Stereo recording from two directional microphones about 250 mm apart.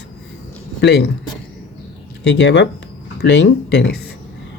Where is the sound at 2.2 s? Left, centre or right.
Left.